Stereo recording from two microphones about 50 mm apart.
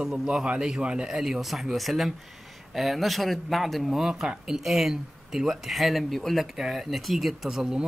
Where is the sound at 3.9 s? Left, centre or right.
Centre.